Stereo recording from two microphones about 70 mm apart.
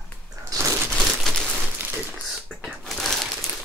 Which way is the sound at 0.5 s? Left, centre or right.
Right.